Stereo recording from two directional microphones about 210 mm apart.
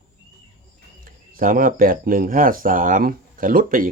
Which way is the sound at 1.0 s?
40° right (ahead or behind).